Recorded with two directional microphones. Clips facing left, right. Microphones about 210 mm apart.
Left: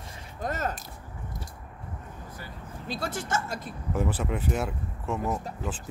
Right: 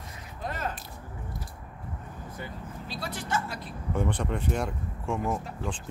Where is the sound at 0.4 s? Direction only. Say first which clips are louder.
Left 3 dB; 45° left (ahead or behind).